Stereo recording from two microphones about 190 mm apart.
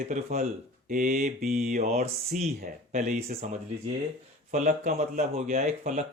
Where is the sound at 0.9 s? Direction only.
45° right (ahead or behind).